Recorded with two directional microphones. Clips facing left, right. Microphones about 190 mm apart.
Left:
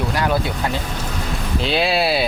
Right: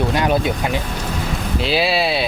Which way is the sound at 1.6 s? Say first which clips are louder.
Even; centre (ahead or behind).